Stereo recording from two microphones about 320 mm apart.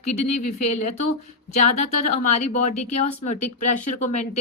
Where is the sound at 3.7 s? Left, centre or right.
Left.